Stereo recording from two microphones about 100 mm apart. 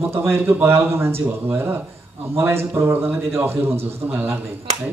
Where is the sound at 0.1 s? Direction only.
25° right (ahead or behind).